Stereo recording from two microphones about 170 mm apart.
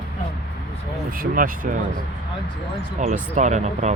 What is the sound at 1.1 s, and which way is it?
Speech, 55° right (ahead or behind).